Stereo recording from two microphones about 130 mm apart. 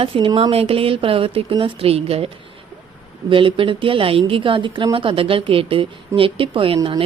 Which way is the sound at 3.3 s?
40° right (ahead or behind).